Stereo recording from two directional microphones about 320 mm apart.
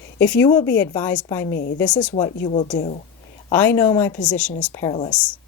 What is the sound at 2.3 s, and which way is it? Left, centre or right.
Speech, left.